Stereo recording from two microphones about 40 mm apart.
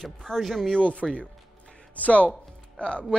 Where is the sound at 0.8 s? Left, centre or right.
Left.